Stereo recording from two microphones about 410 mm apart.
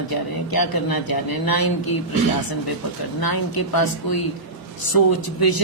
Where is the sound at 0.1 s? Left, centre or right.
Left.